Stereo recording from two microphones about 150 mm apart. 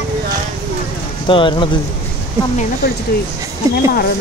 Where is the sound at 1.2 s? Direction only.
35° left (ahead or behind).